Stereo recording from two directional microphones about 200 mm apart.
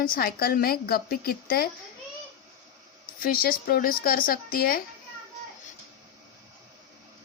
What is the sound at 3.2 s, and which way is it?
A woman's voice, 45° left (ahead or behind).